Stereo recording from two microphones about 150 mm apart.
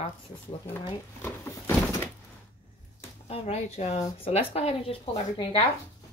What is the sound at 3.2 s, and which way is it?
Speech, 45° left (ahead or behind).